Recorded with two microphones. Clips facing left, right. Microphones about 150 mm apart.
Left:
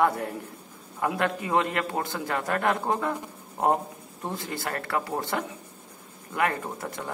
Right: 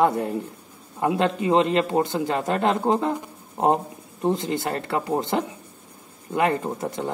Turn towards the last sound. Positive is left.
turn(degrees=-25)  # may be behind; listen again after turning